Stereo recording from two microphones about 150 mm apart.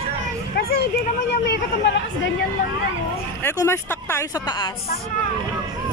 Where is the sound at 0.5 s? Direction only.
90° left.